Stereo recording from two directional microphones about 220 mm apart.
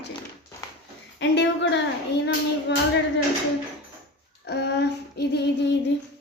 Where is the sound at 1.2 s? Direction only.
50° left (ahead or behind).